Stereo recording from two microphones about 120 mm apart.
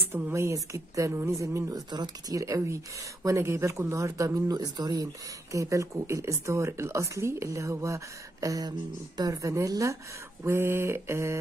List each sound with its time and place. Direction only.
0.1 s speech: 20° right (ahead or behind)